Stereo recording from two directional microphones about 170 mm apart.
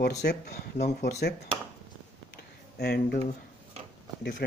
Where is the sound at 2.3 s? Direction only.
65° left (ahead or behind).